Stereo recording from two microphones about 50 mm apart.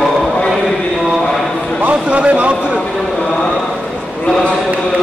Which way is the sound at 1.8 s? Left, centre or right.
Right.